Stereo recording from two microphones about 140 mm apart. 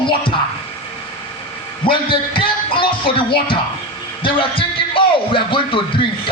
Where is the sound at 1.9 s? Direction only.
40° left (ahead or behind).